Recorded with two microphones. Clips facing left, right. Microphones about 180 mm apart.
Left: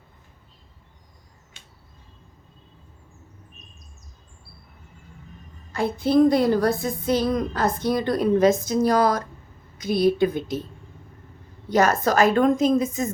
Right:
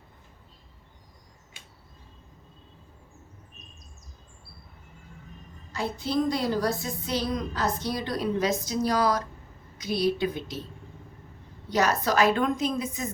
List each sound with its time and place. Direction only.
5.7 s a woman's voice: 55° left (ahead or behind)
11.7 s a woman's voice: 50° left (ahead or behind)